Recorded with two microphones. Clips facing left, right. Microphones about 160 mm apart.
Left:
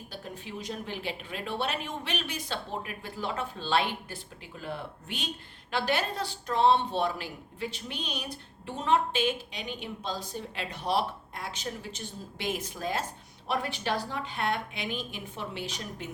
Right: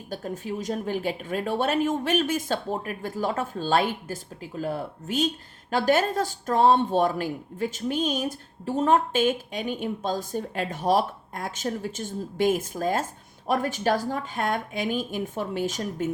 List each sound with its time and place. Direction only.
0.1 s speech: 45° right (ahead or behind)